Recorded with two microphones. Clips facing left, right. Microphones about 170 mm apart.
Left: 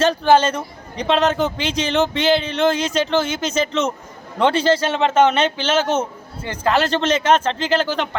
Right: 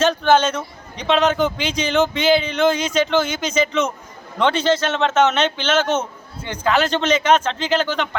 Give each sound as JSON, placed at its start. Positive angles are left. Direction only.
{"t": 0.0, "sound": "a man's voice", "side_deg": 5}
{"t": 1.1, "sound": "speech", "side_deg": 30}
{"t": 1.5, "sound": "speech", "side_deg": 0}